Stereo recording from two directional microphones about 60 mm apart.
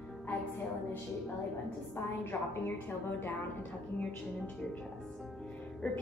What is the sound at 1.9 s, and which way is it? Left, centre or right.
Speech, left.